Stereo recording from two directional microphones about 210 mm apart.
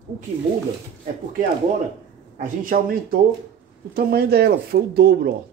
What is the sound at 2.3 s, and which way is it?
Speech, 40° right (ahead or behind).